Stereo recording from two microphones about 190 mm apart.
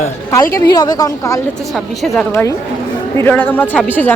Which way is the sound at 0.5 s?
20° left (ahead or behind).